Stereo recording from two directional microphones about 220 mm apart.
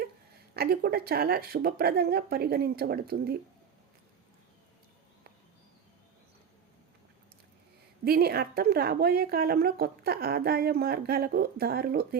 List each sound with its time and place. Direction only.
0.5 s a woman's voice: 45° right (ahead or behind)
8.0 s a woman's voice: 45° right (ahead or behind)